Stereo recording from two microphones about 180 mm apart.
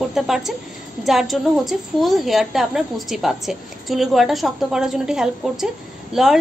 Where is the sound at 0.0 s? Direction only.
Centre (ahead or behind).